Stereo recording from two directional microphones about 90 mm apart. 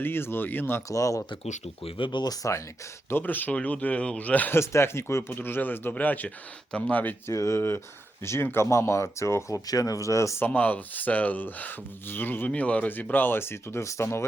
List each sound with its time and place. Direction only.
0.0 s speech: 25° left (ahead or behind)
0.9 s speech: 35° left (ahead or behind)
1.8 s speech: 65° left (ahead or behind); by 2.5 s 45° left (ahead or behind)
3.1 s speech: 20° left (ahead or behind)
4.6 s speech: 30° left (ahead or behind)
7.3 s speech: 35° left (ahead or behind)
10.4 s speech: 20° left (ahead or behind)